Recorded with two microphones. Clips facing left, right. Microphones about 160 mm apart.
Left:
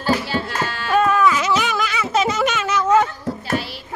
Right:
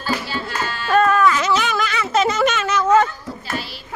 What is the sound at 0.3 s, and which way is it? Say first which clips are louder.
Music: left 2 dB; 65° left (ahead or behind).